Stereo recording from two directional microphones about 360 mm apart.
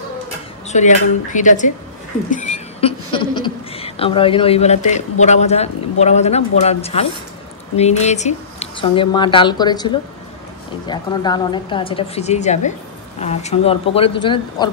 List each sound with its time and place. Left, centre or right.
0.7 s speech: centre
2.3 s a sound: centre
5.2 s speech: centre